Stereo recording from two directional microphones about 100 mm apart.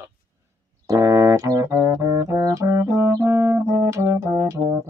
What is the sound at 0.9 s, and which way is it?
Music, 35° right (ahead or behind).